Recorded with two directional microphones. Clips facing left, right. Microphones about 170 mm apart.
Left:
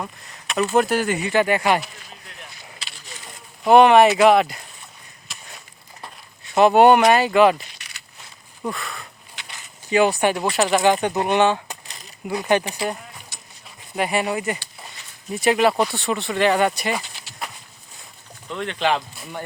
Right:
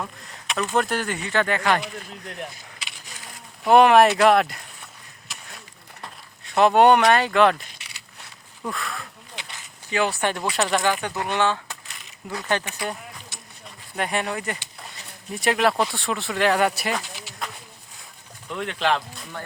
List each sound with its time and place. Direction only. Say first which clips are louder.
0.5 s speech: left 5 dB; 10° left (ahead or behind)
1.8 s speech: right 6 dB; 60° right (ahead or behind)
3.6 s speech: left 2 dB; centre (ahead or behind)
5.5 s a sound: even; centre (ahead or behind)
8.6 s speech: left 2 dB; centre (ahead or behind)
9.9 s speech: left 6 dB; 15° left (ahead or behind)
10.8 s speech: left 6 dB; 20° left (ahead or behind)
11.9 s a sound: left 3 dB; 35° left (ahead or behind)
12.3 s speech: left 6 dB; 15° left (ahead or behind)
12.6 s speech: left 4 dB; 30° left (ahead or behind)
13.9 s speech: left 4 dB; 5° left (ahead or behind)
18.4 s speech: left 2 dB; 5° right (ahead or behind)